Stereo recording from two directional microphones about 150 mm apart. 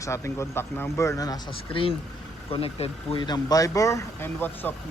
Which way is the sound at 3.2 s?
25° left (ahead or behind).